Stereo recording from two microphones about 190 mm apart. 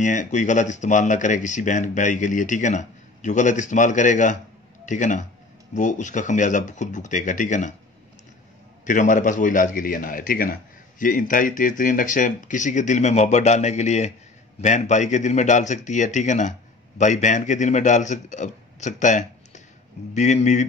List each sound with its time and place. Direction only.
0.0 s a man's voice: 40° left (ahead or behind)
8.8 s a man's voice: 40° left (ahead or behind)